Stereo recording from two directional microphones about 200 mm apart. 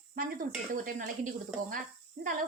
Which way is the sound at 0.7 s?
40° right (ahead or behind).